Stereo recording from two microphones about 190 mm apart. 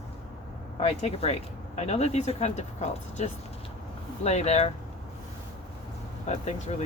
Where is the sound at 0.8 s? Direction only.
30° left (ahead or behind).